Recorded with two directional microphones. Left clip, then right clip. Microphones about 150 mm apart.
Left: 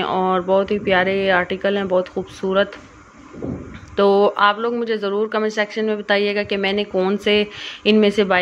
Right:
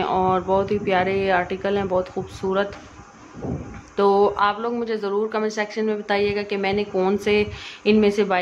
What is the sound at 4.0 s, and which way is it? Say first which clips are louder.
A woman's voice: left 3 dB; 20° left (ahead or behind).